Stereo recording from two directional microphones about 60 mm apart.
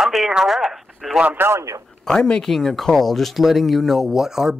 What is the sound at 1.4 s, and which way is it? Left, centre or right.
Speech, right.